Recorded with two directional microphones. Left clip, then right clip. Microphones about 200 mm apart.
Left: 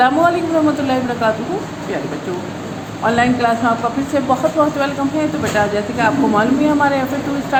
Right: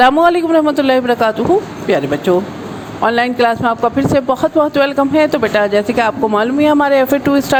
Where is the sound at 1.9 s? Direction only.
55° right (ahead or behind).